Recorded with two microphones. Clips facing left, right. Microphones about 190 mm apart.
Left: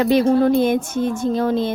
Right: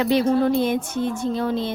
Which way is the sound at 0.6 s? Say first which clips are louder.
Left 4 dB; 50° left (ahead or behind).